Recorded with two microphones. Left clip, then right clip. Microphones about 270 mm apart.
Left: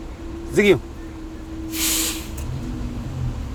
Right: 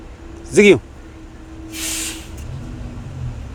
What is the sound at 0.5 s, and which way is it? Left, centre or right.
Speech, right.